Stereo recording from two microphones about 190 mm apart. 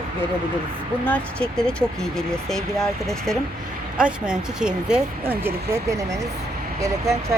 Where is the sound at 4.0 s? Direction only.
5° right (ahead or behind).